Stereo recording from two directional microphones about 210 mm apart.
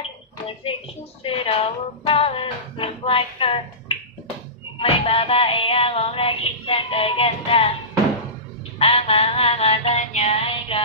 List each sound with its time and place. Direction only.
1.2 s speech: 25° left (ahead or behind)
4.7 s music: 25° left (ahead or behind)
8.7 s music: 25° left (ahead or behind)